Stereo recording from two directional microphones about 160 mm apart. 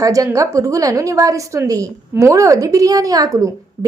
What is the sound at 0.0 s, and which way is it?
A woman's voice, 20° right (ahead or behind).